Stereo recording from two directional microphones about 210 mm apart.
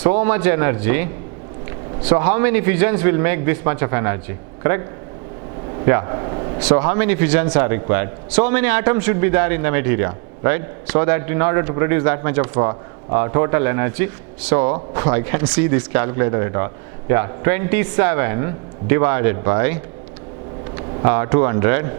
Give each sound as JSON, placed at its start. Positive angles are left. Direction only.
{"t": 0.0, "sound": "speech", "side_deg": -10}
{"t": 5.7, "sound": "a sound", "side_deg": -20}
{"t": 6.6, "sound": "speech", "side_deg": -10}